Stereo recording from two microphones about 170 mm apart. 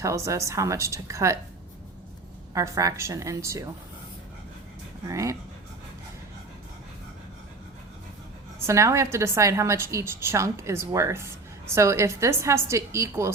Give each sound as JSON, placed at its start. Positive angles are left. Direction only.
{"t": 0.0, "sound": "a woman's voice", "side_deg": -20}
{"t": 2.6, "sound": "a woman's voice", "side_deg": -20}
{"t": 5.0, "sound": "speech", "side_deg": -20}
{"t": 8.5, "sound": "a woman's voice", "side_deg": -15}